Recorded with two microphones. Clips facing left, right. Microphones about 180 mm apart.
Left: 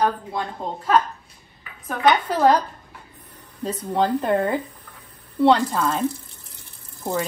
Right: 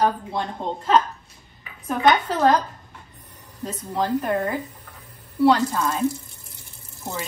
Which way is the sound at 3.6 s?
25° left (ahead or behind).